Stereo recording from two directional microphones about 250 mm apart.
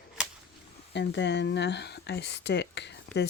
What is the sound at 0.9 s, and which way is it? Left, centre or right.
Speech, left.